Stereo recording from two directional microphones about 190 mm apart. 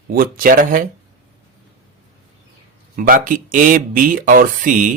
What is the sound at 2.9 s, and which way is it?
Speech, 50° right (ahead or behind).